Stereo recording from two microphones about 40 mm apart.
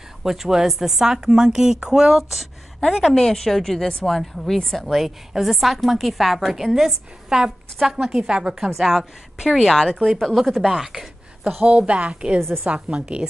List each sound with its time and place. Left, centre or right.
0.2 s a woman's voice: centre
3.2 s a woman's voice: centre
7.2 s a woman's voice: centre
10.0 s a woman's voice: centre
10.7 s a woman's voice: centre
11.6 s a woman's voice: right
12.4 s a woman's voice: right
12.6 s a woman's voice: right